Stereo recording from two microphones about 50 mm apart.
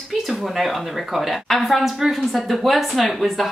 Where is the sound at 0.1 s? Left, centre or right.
Centre.